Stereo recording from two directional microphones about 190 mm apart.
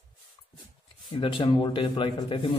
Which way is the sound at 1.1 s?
25° left (ahead or behind).